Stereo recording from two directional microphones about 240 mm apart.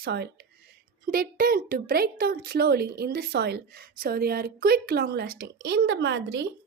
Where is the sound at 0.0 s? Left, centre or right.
Right.